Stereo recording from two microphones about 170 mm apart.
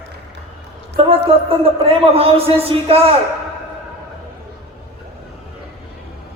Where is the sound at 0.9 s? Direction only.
35° right (ahead or behind).